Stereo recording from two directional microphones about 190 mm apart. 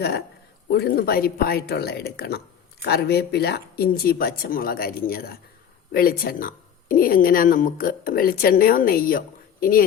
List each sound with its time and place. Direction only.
0.7 s a woman's voice: 60° left (ahead or behind)